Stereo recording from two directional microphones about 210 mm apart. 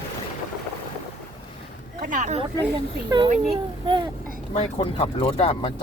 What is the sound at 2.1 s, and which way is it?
Speech, 35° right (ahead or behind).